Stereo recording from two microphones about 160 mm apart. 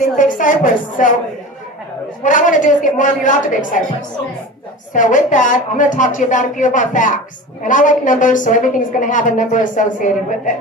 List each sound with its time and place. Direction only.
0.0 s a woman's voice: 55° left (ahead or behind)
2.2 s a woman's voice: 55° left (ahead or behind)
4.9 s a woman's voice: 55° left (ahead or behind)